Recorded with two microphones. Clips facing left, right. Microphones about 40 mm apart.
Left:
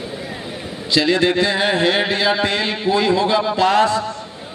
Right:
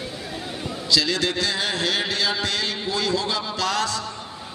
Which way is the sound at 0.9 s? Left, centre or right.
Left.